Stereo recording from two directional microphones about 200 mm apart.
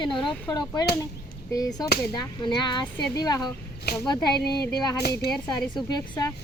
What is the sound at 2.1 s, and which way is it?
Speech, 20° left (ahead or behind).